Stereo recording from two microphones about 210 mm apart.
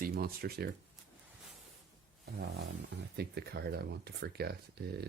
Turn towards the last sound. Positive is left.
turn(degrees=-50)  # may be behind; listen again after turning